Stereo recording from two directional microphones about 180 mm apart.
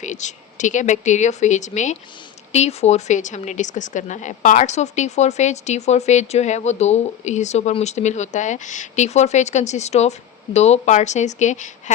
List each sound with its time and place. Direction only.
0.0 s speech: 40° left (ahead or behind)